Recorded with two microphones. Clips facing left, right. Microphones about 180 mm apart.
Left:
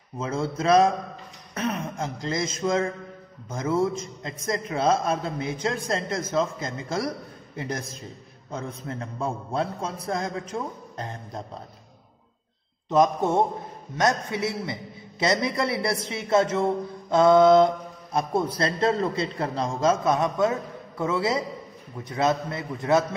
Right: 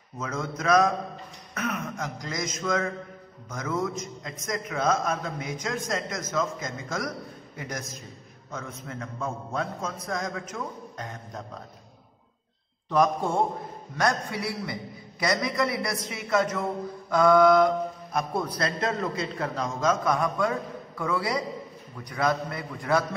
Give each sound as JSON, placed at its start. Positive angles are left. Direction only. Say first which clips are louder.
{"t": 0.2, "sound": "a man's voice", "louder": "left 4 dB", "side_deg": 30}
{"t": 12.9, "sound": "a man's voice", "louder": "left 3 dB", "side_deg": 20}